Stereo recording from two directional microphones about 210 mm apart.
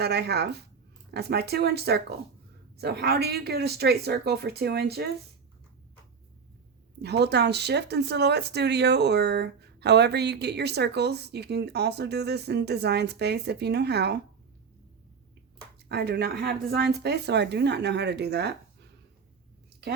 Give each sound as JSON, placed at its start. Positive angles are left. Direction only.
{"t": 0.0, "sound": "speech", "side_deg": -50}
{"t": 7.0, "sound": "speech", "side_deg": -50}
{"t": 15.9, "sound": "speech", "side_deg": -50}